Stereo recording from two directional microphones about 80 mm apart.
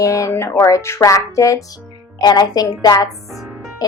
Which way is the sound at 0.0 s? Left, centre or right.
Left.